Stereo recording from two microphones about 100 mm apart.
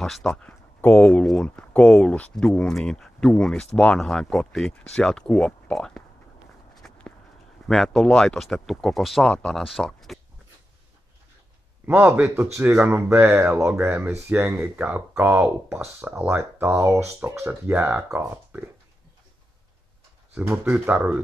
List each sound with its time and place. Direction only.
0.0 s speech: 5° left (ahead or behind)
6.7 s walk: 5° left (ahead or behind)
7.6 s speech: centre (ahead or behind)
11.8 s speech: 20° right (ahead or behind)
20.7 s speech: 15° right (ahead or behind)